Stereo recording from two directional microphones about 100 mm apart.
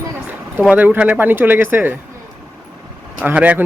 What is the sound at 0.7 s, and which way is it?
Speech, 15° right (ahead or behind).